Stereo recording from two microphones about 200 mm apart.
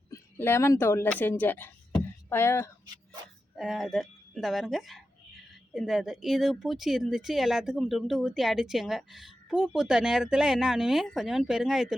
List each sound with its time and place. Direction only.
0.1 s speech: 10° left (ahead or behind)
2.8 s a sound: 20° right (ahead or behind)
3.5 s speech: centre (ahead or behind)